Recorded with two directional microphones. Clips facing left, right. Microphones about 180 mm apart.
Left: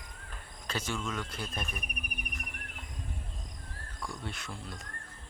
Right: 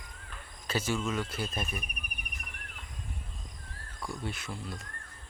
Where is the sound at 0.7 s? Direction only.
5° right (ahead or behind).